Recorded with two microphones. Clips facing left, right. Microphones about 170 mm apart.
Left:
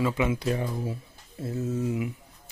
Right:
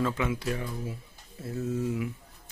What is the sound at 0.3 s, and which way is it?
Speech, 25° left (ahead or behind).